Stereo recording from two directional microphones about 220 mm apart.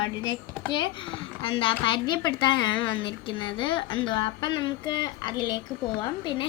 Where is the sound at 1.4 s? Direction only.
25° left (ahead or behind).